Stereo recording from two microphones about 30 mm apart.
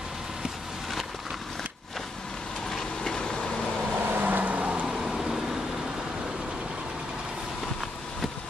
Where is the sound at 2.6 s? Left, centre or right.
Centre; by 3.6 s left.